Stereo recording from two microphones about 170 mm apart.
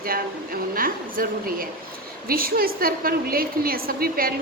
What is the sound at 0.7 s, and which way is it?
A woman's voice, 55° right (ahead or behind).